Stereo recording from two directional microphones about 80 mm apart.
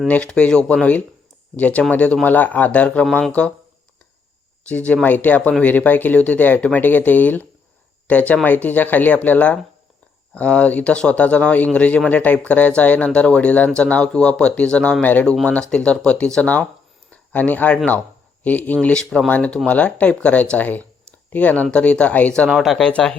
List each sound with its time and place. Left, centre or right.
0.1 s speech: centre
3.1 s speech: centre
4.6 s speech: centre
17.1 s a sound: centre
18.4 s speech: left
22.4 s speech: centre
22.9 s speech: centre